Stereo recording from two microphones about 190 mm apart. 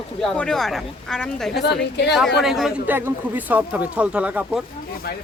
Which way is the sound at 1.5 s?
60° left (ahead or behind).